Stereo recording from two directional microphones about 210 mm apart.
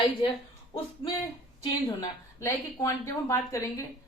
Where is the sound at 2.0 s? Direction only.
15° left (ahead or behind).